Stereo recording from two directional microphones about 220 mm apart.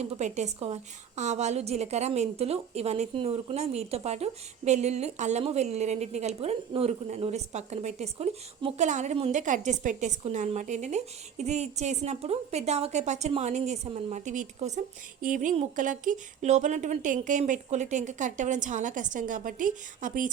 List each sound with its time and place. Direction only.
0.0 s a woman's voice: 30° right (ahead or behind)